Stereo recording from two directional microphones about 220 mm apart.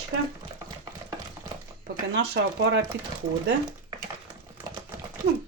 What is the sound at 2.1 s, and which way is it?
Speech, 55° right (ahead or behind).